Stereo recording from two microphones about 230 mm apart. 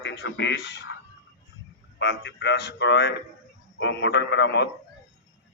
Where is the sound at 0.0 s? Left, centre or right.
Left.